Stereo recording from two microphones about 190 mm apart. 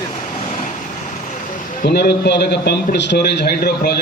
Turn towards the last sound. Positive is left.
turn(degrees=55)  # may be behind; listen again after turning